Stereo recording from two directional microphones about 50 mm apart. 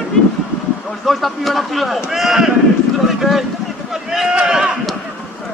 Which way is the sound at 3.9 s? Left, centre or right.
Centre.